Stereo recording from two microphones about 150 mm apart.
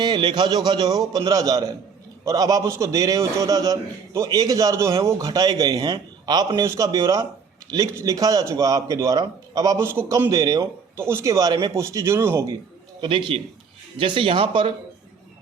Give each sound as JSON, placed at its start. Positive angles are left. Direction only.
{"t": 0.0, "sound": "a man's voice", "side_deg": -30}
{"t": 13.0, "sound": "speech", "side_deg": -35}